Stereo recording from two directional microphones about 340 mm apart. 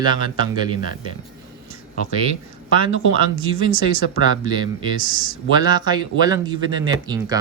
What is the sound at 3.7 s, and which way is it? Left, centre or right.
Speech, left.